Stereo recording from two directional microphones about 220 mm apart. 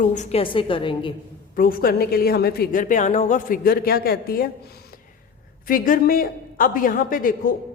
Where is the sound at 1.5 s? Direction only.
40° left (ahead or behind).